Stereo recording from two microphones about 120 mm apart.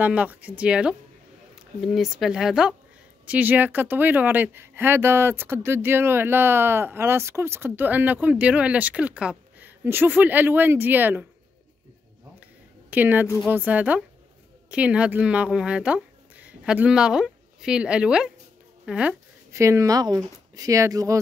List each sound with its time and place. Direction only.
0.0 s speech: 15° right (ahead or behind)
12.9 s speech: 15° right (ahead or behind)
19.5 s speech: 25° right (ahead or behind)